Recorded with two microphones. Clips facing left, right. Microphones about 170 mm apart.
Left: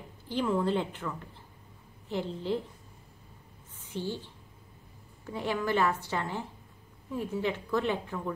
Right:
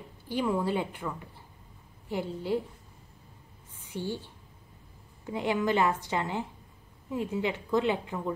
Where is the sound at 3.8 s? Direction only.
15° right (ahead or behind).